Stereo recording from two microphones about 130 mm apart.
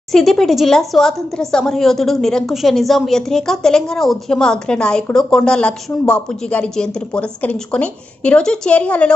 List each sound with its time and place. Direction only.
0.1 s speech: centre (ahead or behind)